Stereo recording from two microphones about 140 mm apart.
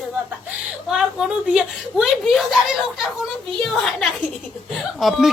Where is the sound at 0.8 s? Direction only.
5° right (ahead or behind).